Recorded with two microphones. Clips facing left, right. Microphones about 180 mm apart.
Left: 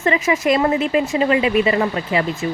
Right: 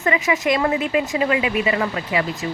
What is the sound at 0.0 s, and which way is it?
A woman's voice, 30° left (ahead or behind).